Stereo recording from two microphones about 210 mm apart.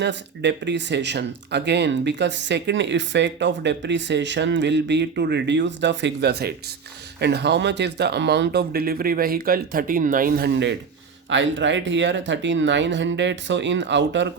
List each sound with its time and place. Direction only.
0.0 s speech: 55° right (ahead or behind)
11.3 s speech: 60° right (ahead or behind)